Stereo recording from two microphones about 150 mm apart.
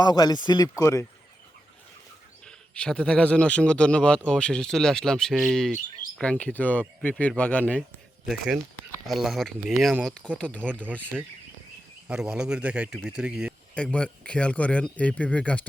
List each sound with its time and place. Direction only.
0.0 s speech: 25° left (ahead or behind)
2.4 s a man's voice: 5° left (ahead or behind)
9.0 s a man's voice: centre (ahead or behind)
12.0 s speech: 5° right (ahead or behind)
13.7 s a man's voice: 5° left (ahead or behind)